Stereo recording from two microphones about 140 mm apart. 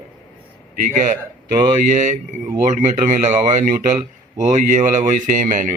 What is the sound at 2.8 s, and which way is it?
Speech, 65° right (ahead or behind).